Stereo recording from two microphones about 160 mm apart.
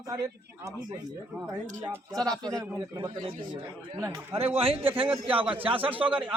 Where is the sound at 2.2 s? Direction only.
25° right (ahead or behind).